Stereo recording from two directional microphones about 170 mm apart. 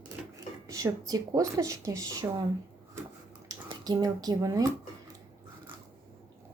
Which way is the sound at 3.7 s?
25° right (ahead or behind).